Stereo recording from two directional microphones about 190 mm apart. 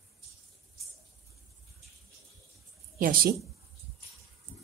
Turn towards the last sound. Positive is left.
turn(degrees=-50)  # may be behind; listen again after turning